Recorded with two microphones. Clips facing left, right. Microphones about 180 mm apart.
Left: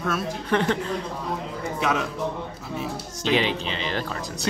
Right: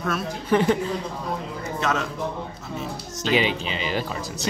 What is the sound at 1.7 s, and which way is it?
Speech, 10° left (ahead or behind).